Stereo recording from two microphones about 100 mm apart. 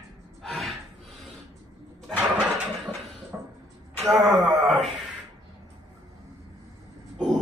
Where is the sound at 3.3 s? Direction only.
25° right (ahead or behind).